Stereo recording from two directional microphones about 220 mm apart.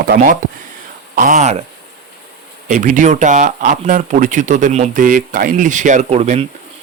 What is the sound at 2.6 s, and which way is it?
Speech, 35° right (ahead or behind).